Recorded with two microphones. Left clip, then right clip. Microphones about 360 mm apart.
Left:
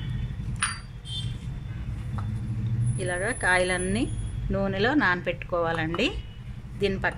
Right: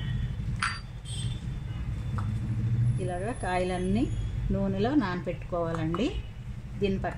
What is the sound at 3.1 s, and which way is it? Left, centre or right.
Speech, left.